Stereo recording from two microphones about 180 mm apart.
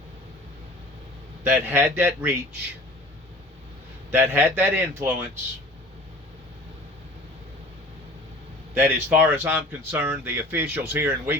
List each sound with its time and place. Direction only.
1.5 s speech: 15° right (ahead or behind)
4.1 s speech: 10° right (ahead or behind)
8.7 s speech: 10° right (ahead or behind)